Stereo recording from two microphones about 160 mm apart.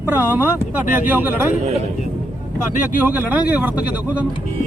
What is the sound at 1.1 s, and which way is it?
Speech, 10° right (ahead or behind).